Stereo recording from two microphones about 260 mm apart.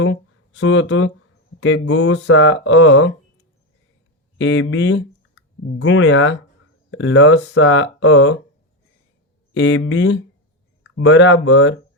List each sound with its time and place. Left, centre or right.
0.0 s speech: left
4.4 s speech: left
9.6 s speech: left